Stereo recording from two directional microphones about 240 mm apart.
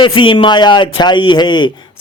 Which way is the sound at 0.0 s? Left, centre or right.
Left.